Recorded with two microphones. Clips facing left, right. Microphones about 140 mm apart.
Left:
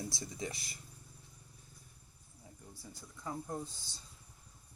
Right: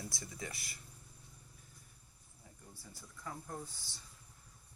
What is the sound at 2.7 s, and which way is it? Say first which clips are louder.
Speech: left 3 dB; 15° left (ahead or behind).